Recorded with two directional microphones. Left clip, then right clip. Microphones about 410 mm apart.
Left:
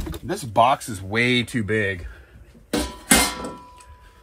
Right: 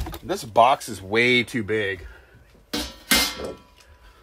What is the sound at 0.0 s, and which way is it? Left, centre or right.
Speech, centre.